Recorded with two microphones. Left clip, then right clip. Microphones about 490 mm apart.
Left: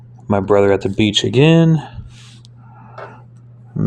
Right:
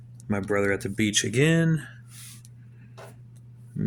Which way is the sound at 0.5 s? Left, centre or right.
Right.